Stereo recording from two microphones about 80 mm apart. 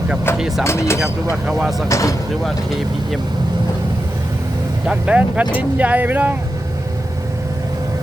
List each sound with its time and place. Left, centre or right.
0.3 s speech: centre
0.6 s speech: left
1.5 s speech: centre
1.9 s speech: left
2.4 s speech: centre
4.9 s speech: centre